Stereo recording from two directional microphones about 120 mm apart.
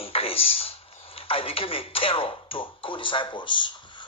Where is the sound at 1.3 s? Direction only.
50° left (ahead or behind).